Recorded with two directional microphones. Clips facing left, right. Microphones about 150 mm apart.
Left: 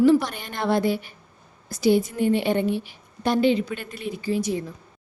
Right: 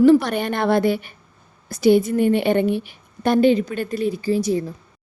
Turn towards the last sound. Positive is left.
turn(degrees=-35)  # may be behind; listen again after turning